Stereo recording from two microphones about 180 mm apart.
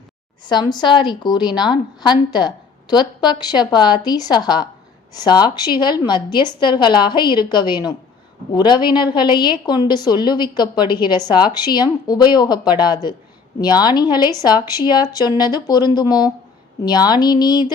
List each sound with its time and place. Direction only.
0.4 s a woman's voice: 25° left (ahead or behind)